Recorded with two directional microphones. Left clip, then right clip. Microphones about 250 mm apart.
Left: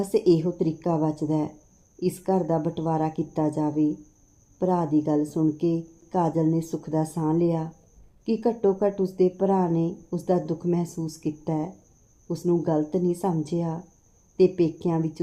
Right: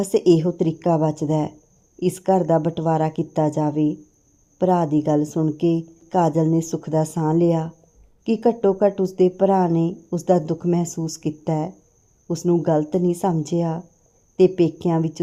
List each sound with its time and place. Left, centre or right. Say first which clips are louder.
0.0 s speech: right 4 dB; right